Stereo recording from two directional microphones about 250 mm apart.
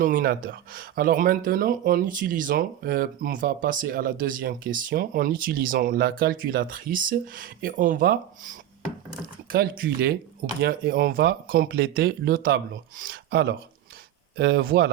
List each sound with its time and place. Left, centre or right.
0.0 s speech: right